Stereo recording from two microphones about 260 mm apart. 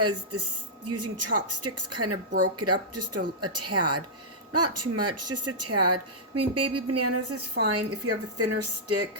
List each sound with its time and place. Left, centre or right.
0.0 s speech: right